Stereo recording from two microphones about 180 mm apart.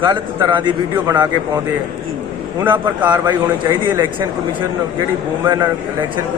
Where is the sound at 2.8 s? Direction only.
25° right (ahead or behind).